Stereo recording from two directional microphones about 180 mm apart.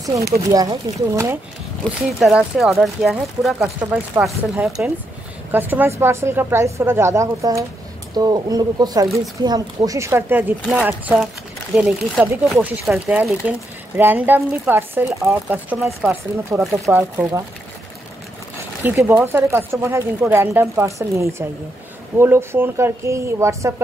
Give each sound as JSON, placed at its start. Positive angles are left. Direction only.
{"t": 0.5, "sound": "speech", "side_deg": -20}
{"t": 2.1, "sound": "speech", "side_deg": 0}
{"t": 3.5, "sound": "speech", "side_deg": -15}
{"t": 18.9, "sound": "speech", "side_deg": -10}